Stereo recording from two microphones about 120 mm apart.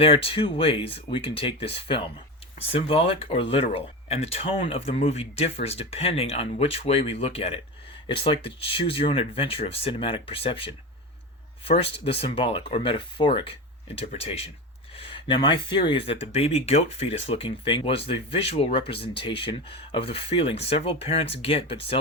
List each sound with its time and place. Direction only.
0.0 s speech: 50° left (ahead or behind)
16.3 s speech: 55° left (ahead or behind)